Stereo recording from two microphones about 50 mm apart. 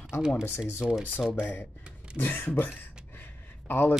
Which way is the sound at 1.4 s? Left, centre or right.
Left.